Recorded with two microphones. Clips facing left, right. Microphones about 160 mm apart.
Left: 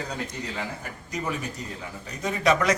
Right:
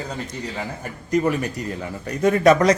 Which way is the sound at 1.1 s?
65° right (ahead or behind).